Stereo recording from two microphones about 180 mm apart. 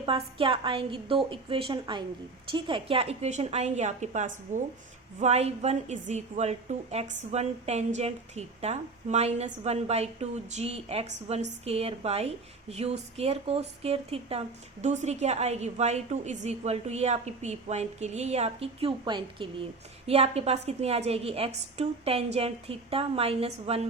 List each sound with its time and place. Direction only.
0.0 s a woman's voice: 30° right (ahead or behind)